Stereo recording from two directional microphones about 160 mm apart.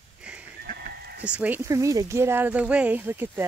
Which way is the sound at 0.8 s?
80° right.